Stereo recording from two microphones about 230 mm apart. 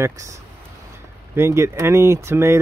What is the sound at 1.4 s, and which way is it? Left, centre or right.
Speech, centre.